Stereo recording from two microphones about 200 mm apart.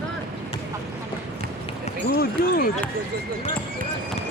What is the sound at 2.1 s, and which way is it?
Speech, 45° left (ahead or behind).